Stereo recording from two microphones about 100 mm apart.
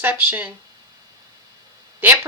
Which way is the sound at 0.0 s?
20° right (ahead or behind).